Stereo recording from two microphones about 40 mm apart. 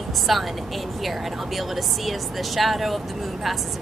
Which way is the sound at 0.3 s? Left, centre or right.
Centre.